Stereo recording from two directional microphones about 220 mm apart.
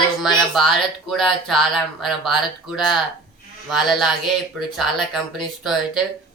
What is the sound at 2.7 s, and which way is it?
Speech, centre (ahead or behind).